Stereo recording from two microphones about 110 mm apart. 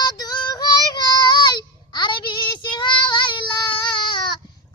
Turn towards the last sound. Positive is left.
turn(degrees=45)  # may be behind; listen again after turning